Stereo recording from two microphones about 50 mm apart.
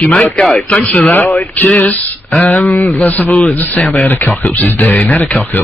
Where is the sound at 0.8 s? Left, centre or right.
Left.